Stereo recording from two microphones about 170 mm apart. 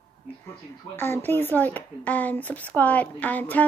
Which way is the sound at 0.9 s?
15° left (ahead or behind).